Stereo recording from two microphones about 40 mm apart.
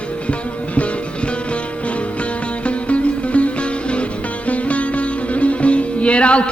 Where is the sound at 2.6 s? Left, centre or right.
Left.